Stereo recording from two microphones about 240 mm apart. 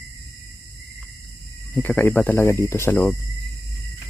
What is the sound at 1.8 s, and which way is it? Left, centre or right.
Speech, centre.